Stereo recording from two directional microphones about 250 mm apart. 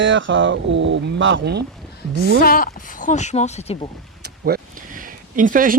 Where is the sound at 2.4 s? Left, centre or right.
Left.